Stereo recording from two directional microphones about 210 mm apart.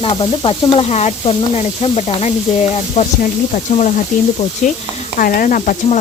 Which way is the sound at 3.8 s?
35° left (ahead or behind).